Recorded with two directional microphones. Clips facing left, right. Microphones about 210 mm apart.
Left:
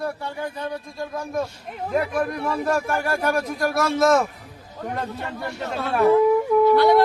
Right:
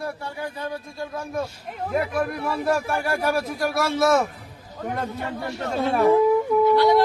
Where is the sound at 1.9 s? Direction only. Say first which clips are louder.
Left 1 dB; 5° right (ahead or behind).